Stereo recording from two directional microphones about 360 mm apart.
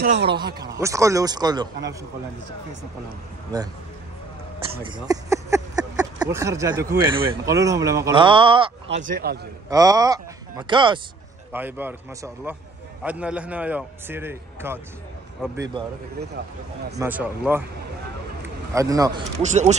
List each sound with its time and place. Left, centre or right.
0.0 s speech: right
0.7 s speech: centre
4.8 s speech: centre
9.7 s a man's voice: centre
17.0 s a man's voice: centre
18.7 s speech: centre